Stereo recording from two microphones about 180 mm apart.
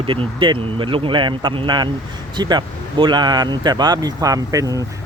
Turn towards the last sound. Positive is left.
turn(degrees=-20)  # may be behind; listen again after turning